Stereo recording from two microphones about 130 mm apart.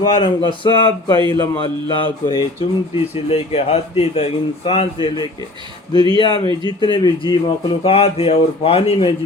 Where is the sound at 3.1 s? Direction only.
50° left (ahead or behind).